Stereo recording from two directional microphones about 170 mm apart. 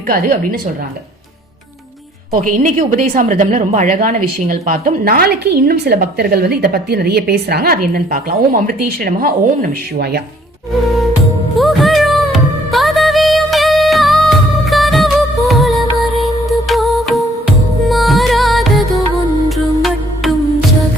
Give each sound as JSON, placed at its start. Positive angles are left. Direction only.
{"t": 0.1, "sound": "a woman's voice", "side_deg": -55}
{"t": 2.3, "sound": "a woman's voice", "side_deg": -50}
{"t": 11.5, "sound": "music", "side_deg": 0}